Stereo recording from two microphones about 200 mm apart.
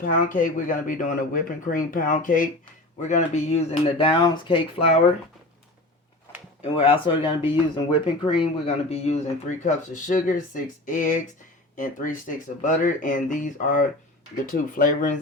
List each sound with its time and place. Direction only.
0.0 s speech: 40° left (ahead or behind)
6.6 s speech: 30° left (ahead or behind)